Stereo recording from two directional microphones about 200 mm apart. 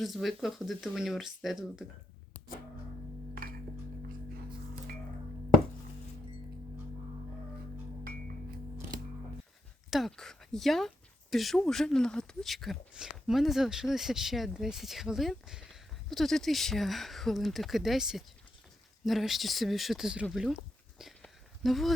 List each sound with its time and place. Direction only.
0.0 s speech: centre (ahead or behind)
9.9 s speech: centre (ahead or behind)
21.0 s a sound: centre (ahead or behind)